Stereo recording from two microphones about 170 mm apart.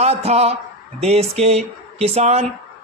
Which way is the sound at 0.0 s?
40° right (ahead or behind).